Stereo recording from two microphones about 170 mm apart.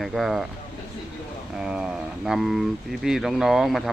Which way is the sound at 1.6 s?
5° right (ahead or behind).